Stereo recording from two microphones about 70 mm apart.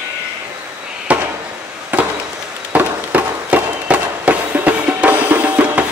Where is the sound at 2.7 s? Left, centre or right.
Right.